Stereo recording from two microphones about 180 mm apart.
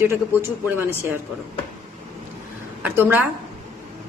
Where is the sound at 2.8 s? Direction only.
10° right (ahead or behind).